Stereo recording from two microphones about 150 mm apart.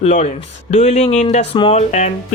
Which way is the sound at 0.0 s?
50° left (ahead or behind).